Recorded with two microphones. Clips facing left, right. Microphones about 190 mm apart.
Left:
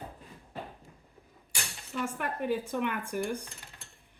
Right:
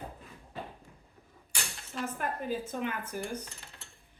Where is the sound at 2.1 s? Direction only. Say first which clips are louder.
Left 2 dB; 65° left (ahead or behind).